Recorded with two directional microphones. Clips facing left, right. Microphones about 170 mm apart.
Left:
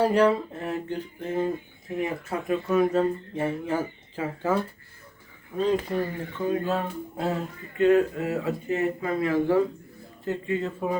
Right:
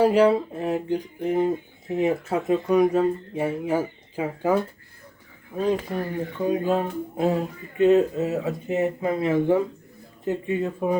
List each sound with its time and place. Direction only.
0.0 s speech: 10° right (ahead or behind)
5.5 s speech: 10° right (ahead or behind)